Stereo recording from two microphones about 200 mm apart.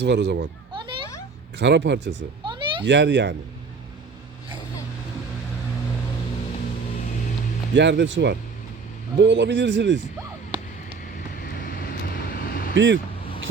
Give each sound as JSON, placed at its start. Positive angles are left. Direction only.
{"t": 0.0, "sound": "speech", "side_deg": -60}
{"t": 1.5, "sound": "speech", "side_deg": -60}
{"t": 2.4, "sound": "a sound", "side_deg": -25}
{"t": 2.8, "sound": "speech", "side_deg": -65}
{"t": 7.8, "sound": "speech", "side_deg": -60}
{"t": 10.5, "sound": "a sound", "side_deg": -20}
{"t": 11.3, "sound": "vehicle", "side_deg": 45}
{"t": 12.7, "sound": "speech", "side_deg": -70}